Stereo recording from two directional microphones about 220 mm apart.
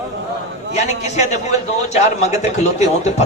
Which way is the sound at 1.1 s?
30° left (ahead or behind).